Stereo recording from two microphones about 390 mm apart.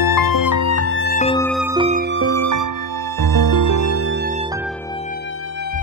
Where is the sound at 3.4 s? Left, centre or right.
Right.